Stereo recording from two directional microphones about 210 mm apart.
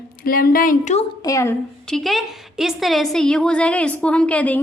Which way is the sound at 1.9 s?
Centre (ahead or behind).